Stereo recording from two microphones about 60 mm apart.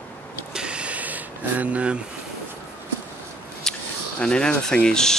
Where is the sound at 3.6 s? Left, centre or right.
Centre.